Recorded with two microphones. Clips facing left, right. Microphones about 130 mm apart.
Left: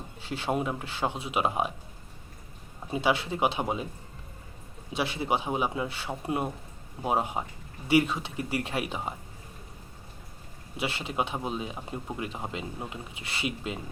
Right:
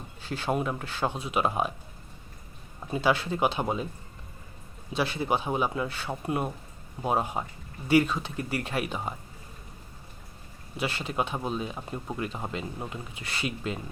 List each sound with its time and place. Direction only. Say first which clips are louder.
0.2 s speech: right 1 dB; 25° left (ahead or behind)
2.9 s speech: right 1 dB; 25° left (ahead or behind)
4.9 s speech: right 1 dB; 25° left (ahead or behind)
10.8 s speech: right 1 dB; 25° left (ahead or behind)